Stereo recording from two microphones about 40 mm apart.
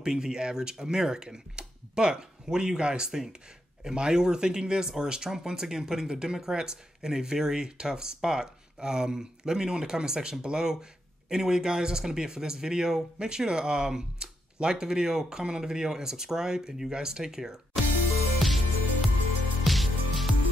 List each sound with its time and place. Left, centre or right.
0.0 s speech: centre
18.4 s music: centre